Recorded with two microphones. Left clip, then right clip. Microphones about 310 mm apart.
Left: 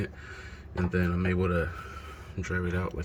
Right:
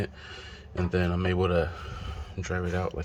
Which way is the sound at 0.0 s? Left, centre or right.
Centre.